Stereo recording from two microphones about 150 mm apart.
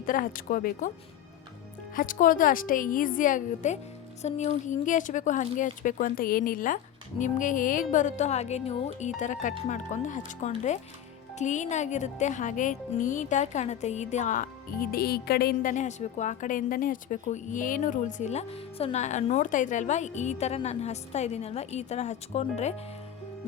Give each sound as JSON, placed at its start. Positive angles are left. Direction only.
{"t": 0.0, "sound": "speech", "side_deg": 65}
{"t": 2.0, "sound": "a woman's voice", "side_deg": 65}
{"t": 15.7, "sound": "speech", "side_deg": 50}